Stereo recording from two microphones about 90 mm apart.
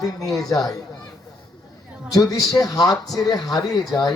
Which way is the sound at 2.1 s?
40° left (ahead or behind).